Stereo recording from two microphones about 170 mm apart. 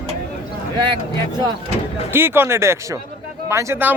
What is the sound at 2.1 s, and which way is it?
A man's voice, 15° right (ahead or behind).